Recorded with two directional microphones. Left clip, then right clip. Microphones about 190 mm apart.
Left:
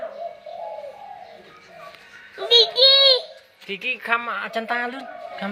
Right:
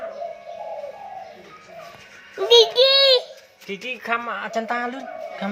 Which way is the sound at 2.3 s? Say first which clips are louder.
Right 2 dB; 45° right (ahead or behind).